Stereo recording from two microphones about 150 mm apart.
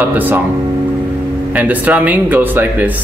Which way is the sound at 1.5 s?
10° right (ahead or behind).